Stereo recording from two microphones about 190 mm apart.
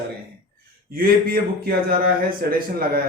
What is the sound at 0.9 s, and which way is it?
Speech, 55° right (ahead or behind).